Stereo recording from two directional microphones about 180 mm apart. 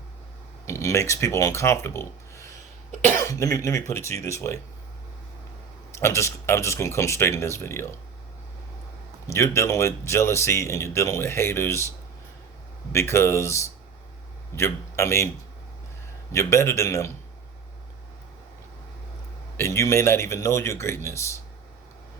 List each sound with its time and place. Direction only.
0.6 s speech: 15° left (ahead or behind)
5.9 s speech: 15° left (ahead or behind)
9.2 s speech: 15° left (ahead or behind)
12.9 s speech: 15° left (ahead or behind)
16.3 s speech: 15° left (ahead or behind)
19.5 s speech: 15° left (ahead or behind)